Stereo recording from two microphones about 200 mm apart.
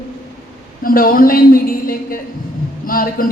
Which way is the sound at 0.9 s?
45° left (ahead or behind).